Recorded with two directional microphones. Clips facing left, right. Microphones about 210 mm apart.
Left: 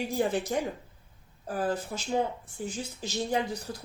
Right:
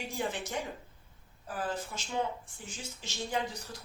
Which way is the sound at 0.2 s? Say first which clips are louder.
Left 7 dB; 40° left (ahead or behind).